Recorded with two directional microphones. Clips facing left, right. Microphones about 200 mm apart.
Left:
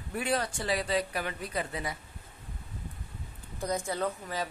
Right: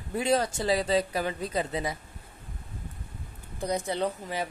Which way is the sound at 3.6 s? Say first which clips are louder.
Right 3 dB; 15° right (ahead or behind).